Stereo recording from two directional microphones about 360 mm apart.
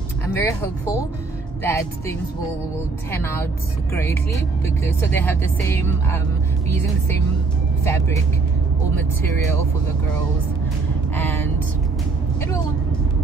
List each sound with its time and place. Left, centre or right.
0.4 s speech: centre
7.8 s speech: centre